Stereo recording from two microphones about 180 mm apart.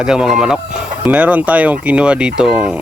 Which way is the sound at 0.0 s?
5° right (ahead or behind).